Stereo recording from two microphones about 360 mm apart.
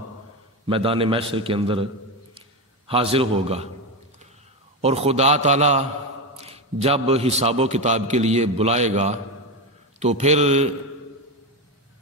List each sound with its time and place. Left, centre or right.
0.7 s a man's voice: centre
2.9 s a man's voice: centre
4.8 s a man's voice: centre